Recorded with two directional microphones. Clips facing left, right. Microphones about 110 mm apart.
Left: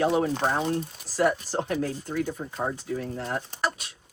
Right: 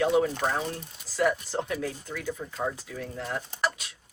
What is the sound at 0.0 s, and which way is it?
Speech, 30° left (ahead or behind).